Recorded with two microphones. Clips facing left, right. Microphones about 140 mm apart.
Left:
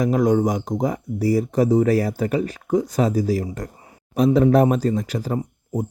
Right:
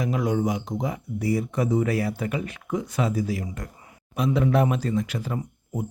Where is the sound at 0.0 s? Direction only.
40° left (ahead or behind).